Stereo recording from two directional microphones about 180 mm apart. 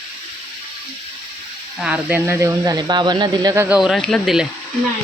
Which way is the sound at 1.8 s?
10° right (ahead or behind).